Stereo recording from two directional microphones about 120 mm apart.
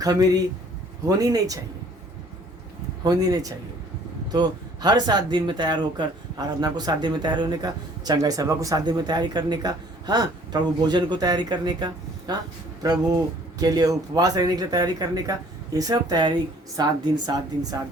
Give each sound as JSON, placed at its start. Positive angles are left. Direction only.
{"t": 0.0, "sound": "speech", "side_deg": -30}
{"t": 3.0, "sound": "speech", "side_deg": -30}